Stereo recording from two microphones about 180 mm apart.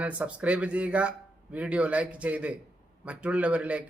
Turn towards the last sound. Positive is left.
turn(degrees=-5)  # may be behind; listen again after turning